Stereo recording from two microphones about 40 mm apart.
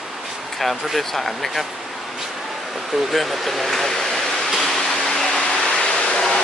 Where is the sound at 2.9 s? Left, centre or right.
Centre.